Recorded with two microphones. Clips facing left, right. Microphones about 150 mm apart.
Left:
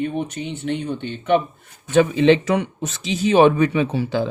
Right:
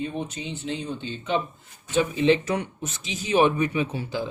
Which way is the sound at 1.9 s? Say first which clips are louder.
Left 6 dB; 75° left (ahead or behind).